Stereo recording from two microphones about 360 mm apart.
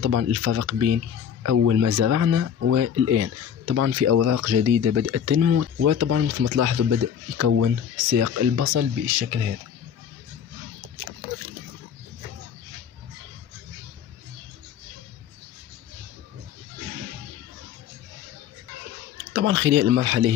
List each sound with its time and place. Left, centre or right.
0.0 s speech: right
19.3 s speech: right